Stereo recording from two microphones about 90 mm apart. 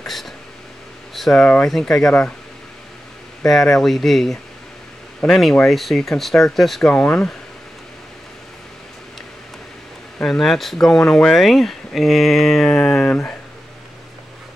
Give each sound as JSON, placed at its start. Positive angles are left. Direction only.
{"t": 0.0, "sound": "a sound", "side_deg": 0}
{"t": 1.4, "sound": "speech", "side_deg": 10}
{"t": 3.4, "sound": "speech", "side_deg": 5}
{"t": 10.2, "sound": "speech", "side_deg": 5}
{"t": 12.8, "sound": "speech", "side_deg": 15}